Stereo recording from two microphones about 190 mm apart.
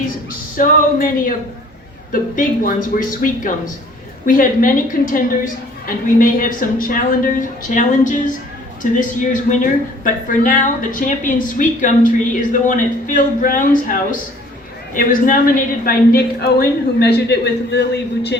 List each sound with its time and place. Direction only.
0.5 s a woman's voice: 45° left (ahead or behind)
2.3 s a woman's voice: 45° left (ahead or behind); by 18.3 s 60° left (ahead or behind)